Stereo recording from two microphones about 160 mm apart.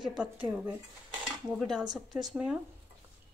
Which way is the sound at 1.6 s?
Centre (ahead or behind).